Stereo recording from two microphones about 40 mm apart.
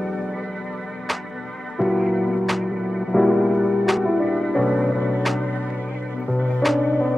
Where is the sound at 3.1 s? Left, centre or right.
Centre.